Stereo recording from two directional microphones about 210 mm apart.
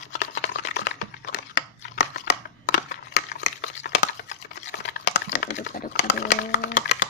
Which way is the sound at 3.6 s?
50° left (ahead or behind).